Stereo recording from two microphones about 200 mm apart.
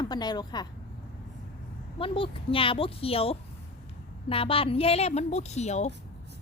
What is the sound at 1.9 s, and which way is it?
A woman's voice, 25° left (ahead or behind).